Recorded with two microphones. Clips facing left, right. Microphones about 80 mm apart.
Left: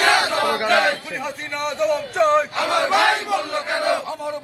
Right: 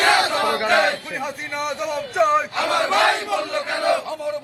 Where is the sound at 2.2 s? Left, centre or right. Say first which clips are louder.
Even; centre.